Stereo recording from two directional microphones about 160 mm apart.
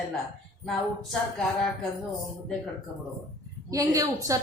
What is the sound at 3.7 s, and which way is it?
Speech, 20° right (ahead or behind).